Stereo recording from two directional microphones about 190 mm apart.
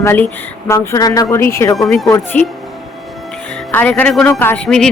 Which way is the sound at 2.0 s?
15° left (ahead or behind).